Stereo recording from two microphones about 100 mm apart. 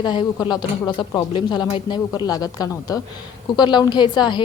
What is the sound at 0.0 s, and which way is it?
Speech, 50° left (ahead or behind).